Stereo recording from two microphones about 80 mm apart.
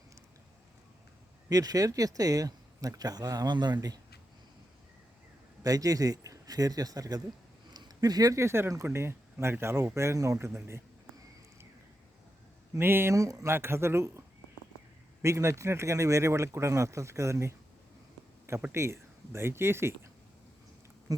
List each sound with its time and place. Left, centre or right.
1.5 s speech: right
3.8 s speech: right
5.6 s speech: right
7.7 s a sound: right
8.4 s speech: right
12.7 s speech: right
13.1 s speech: right
13.5 s speech: right
18.7 s speech: right
21.1 s insect: right